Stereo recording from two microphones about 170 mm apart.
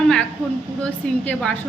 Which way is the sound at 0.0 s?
5° left (ahead or behind).